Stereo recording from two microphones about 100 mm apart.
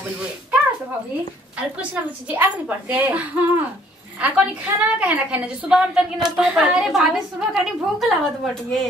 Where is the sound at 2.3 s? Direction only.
15° right (ahead or behind).